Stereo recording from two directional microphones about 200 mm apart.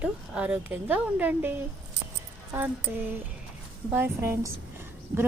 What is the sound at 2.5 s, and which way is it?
A woman's voice, 10° right (ahead or behind).